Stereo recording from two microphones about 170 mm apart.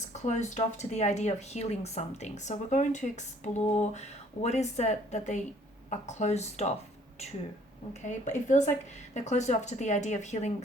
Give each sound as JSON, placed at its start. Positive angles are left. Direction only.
{"t": 0.1, "sound": "speech", "side_deg": 45}
{"t": 8.0, "sound": "speech", "side_deg": 45}